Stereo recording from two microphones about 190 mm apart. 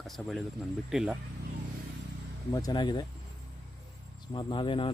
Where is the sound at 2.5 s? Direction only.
20° left (ahead or behind).